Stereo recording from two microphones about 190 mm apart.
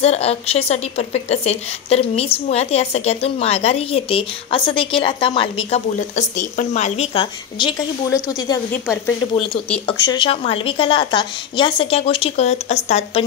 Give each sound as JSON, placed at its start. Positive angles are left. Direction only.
{"t": 0.0, "sound": "a woman's voice", "side_deg": 35}
{"t": 7.5, "sound": "a woman's voice", "side_deg": 25}
{"t": 9.8, "sound": "a woman's voice", "side_deg": 25}